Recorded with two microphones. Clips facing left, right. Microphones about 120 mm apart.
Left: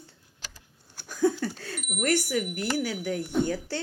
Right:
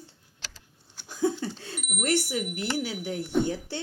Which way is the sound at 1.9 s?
50° left (ahead or behind).